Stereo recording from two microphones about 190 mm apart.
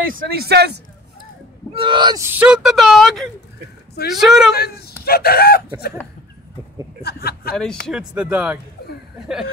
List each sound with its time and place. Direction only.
0.0 s speech: 50° right (ahead or behind)
1.8 s speech: 25° right (ahead or behind); by 4.5 s centre (ahead or behind)
4.6 s speech: 55° left (ahead or behind)
7.0 s a sound: 55° left (ahead or behind)
7.8 s speech: 5° right (ahead or behind)